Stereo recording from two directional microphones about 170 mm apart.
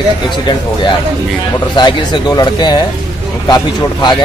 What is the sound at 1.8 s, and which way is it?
Speech, 25° left (ahead or behind).